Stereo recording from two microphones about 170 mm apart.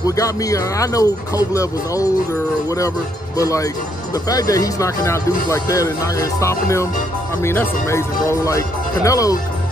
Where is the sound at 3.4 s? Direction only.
20° left (ahead or behind).